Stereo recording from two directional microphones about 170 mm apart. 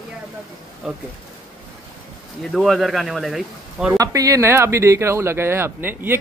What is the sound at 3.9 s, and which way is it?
Speech, 20° right (ahead or behind).